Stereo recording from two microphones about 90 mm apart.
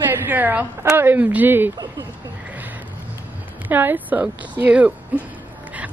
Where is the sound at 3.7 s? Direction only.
20° right (ahead or behind).